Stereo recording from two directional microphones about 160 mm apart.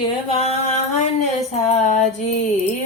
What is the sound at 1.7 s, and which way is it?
Music, 45° left (ahead or behind).